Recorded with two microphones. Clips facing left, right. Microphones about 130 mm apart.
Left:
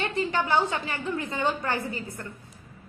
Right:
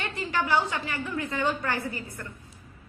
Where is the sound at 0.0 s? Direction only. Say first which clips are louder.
Left 3 dB; 25° left (ahead or behind).